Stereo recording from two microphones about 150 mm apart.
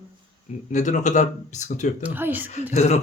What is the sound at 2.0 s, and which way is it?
Speech, 10° right (ahead or behind).